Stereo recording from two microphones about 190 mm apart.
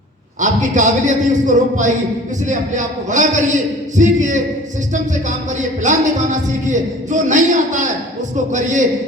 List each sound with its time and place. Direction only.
0.3 s a man's voice: 40° right (ahead or behind)
5.5 s a man's voice: 40° right (ahead or behind)